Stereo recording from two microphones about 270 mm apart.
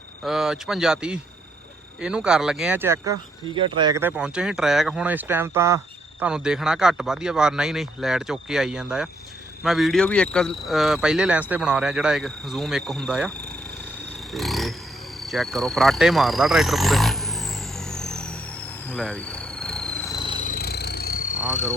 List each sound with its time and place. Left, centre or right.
0.3 s speech: centre
14.3 s a sound: centre
15.3 s speech: centre
17.7 s vehicle: centre
18.9 s a sound: centre
20.4 s vehicle: left